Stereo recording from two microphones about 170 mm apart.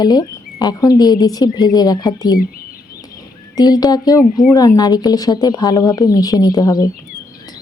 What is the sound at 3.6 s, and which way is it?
Speech, 20° left (ahead or behind).